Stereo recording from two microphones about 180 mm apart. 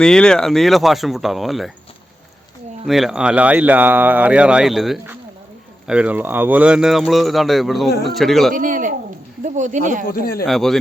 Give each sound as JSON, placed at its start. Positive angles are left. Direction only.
{"t": 0.0, "sound": "speech", "side_deg": 5}
{"t": 2.8, "sound": "speech", "side_deg": 0}
{"t": 8.5, "sound": "speech", "side_deg": -50}
{"t": 10.4, "sound": "speech", "side_deg": 0}